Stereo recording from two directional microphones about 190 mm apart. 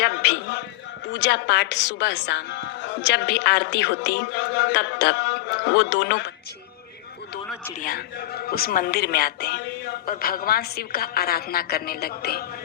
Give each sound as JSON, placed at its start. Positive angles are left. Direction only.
{"t": 0.0, "sound": "a sound", "side_deg": 55}
{"t": 1.0, "sound": "a woman's voice", "side_deg": 70}
{"t": 7.8, "sound": "a woman's voice", "side_deg": 50}